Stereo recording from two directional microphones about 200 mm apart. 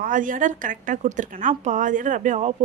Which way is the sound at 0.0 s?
40° right (ahead or behind).